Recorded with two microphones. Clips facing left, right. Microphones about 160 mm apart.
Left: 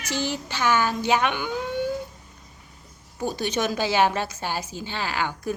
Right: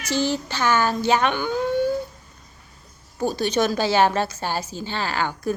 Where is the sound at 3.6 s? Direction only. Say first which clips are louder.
Right 3 dB; 10° left (ahead or behind).